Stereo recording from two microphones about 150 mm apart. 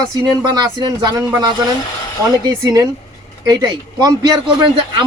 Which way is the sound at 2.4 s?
25° right (ahead or behind).